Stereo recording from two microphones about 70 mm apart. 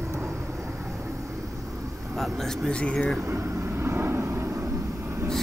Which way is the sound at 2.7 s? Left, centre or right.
Centre.